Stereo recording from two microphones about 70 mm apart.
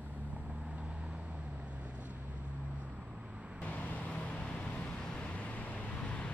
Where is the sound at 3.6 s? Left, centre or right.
Left.